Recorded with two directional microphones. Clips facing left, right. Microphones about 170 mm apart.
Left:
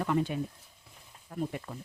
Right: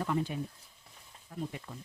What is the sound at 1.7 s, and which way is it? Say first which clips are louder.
Speech: left 4 dB; 75° left (ahead or behind).